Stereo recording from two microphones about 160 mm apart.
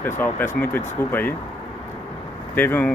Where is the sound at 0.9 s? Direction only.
10° left (ahead or behind).